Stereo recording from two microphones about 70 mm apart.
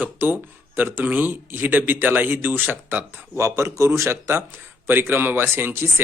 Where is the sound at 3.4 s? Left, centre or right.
Right.